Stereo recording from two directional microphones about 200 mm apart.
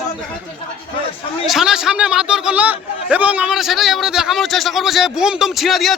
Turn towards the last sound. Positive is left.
turn(degrees=0)  # may be behind; listen again after turning